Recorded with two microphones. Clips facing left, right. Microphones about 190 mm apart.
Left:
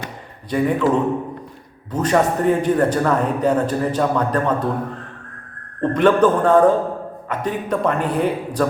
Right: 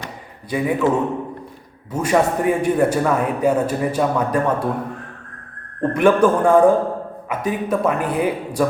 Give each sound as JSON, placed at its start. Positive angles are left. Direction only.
{"t": 0.5, "sound": "a man's voice", "side_deg": -5}
{"t": 1.9, "sound": "a man's voice", "side_deg": -10}
{"t": 5.8, "sound": "a man's voice", "side_deg": -10}